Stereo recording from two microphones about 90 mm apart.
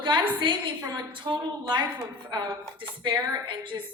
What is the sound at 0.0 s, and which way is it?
A woman's voice, 60° right (ahead or behind).